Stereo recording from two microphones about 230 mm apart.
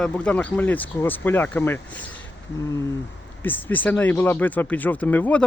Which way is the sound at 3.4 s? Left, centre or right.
Centre.